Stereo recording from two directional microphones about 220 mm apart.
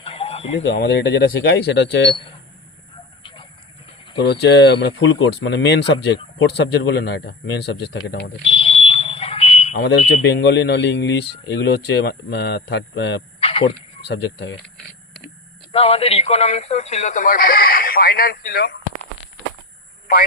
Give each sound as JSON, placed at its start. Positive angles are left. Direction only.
{"t": 0.0, "sound": "chicken", "side_deg": 25}
{"t": 0.6, "sound": "speech", "side_deg": 50}
{"t": 4.2, "sound": "speech", "side_deg": 50}
{"t": 8.4, "sound": "fire alarm", "side_deg": 25}
{"t": 10.2, "sound": "speech", "side_deg": 50}
{"t": 13.4, "sound": "a sound", "side_deg": 25}
{"t": 15.7, "sound": "speech", "side_deg": 25}